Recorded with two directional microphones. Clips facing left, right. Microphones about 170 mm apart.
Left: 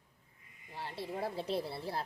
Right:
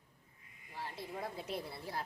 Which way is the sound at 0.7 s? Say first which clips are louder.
Left 4 dB; 30° left (ahead or behind).